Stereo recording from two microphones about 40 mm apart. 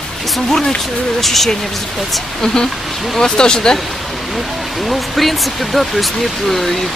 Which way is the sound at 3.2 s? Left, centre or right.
Centre.